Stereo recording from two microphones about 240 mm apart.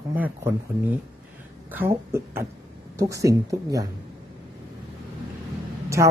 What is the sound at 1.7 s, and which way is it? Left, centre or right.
A woman's voice, centre.